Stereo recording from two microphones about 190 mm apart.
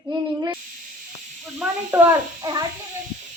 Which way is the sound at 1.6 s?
Centre (ahead or behind).